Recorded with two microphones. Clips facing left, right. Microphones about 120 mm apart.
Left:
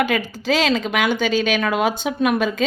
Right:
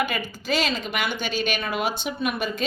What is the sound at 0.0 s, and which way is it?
A woman's voice, 90° left.